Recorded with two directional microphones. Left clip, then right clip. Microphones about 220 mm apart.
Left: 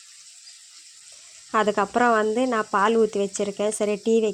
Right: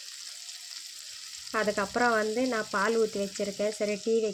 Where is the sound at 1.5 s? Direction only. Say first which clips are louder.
Left 7 dB; 35° left (ahead or behind).